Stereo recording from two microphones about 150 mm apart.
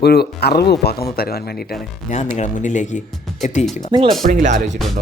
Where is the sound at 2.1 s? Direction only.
50° left (ahead or behind).